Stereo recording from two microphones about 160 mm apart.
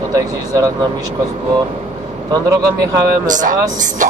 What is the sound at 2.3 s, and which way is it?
Speech, 25° right (ahead or behind).